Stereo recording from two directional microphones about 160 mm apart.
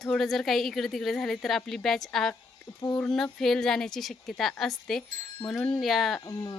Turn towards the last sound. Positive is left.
turn(degrees=20)  # may be behind; listen again after turning